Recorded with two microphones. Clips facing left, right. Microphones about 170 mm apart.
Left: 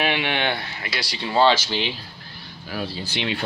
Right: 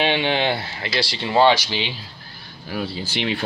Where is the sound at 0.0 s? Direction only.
30° right (ahead or behind); by 1.8 s 15° right (ahead or behind).